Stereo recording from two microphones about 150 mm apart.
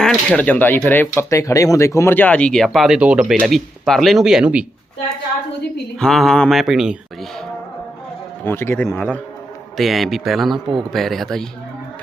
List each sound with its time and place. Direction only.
0.0 s a man's voice: 5° left (ahead or behind)
6.0 s a man's voice: centre (ahead or behind)
8.4 s a man's voice: 15° left (ahead or behind)